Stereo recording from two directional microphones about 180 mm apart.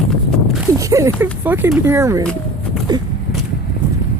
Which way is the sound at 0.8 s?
15° right (ahead or behind).